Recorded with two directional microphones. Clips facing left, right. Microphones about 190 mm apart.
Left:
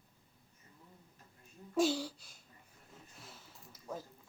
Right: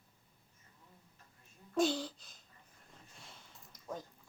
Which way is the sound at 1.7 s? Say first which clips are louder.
Left 1 dB; 10° left (ahead or behind).